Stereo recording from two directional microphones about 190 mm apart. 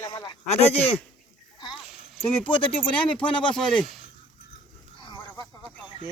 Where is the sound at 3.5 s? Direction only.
Centre (ahead or behind).